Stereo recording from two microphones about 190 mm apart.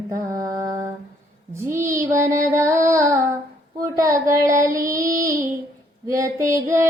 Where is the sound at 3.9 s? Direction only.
15° right (ahead or behind).